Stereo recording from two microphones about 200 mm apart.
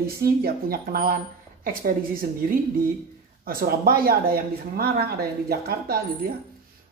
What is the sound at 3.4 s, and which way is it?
Speech, 50° right (ahead or behind).